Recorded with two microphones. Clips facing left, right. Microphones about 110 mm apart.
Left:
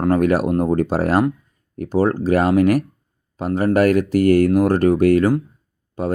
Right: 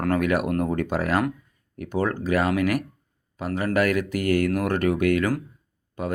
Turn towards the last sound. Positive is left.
turn(degrees=35)  # may be behind; listen again after turning